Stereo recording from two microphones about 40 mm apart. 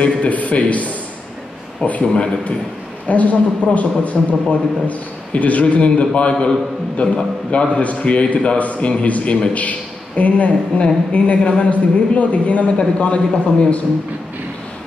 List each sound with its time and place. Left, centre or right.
0.0 s a man's voice: left